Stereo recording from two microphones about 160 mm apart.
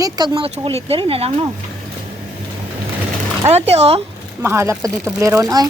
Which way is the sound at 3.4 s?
40° right (ahead or behind).